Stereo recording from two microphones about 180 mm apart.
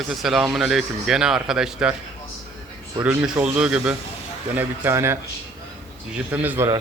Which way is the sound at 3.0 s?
10° right (ahead or behind).